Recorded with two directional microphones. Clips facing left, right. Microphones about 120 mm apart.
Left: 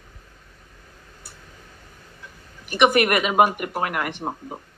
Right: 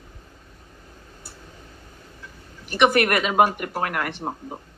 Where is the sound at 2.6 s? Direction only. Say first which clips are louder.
Left 1 dB; 15° left (ahead or behind).